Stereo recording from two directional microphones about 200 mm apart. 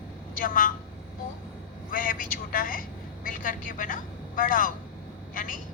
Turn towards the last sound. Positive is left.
turn(degrees=40)  # may be behind; listen again after turning